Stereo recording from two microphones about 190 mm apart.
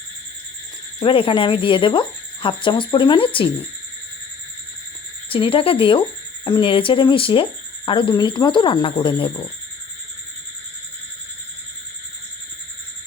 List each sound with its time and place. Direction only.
0.9 s speech: 25° left (ahead or behind)
5.3 s speech: 30° left (ahead or behind)